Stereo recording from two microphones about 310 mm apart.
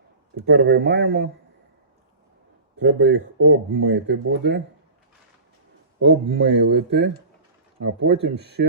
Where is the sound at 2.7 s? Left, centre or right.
Right.